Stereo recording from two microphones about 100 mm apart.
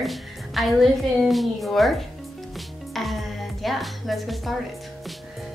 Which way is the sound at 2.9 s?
Centre (ahead or behind).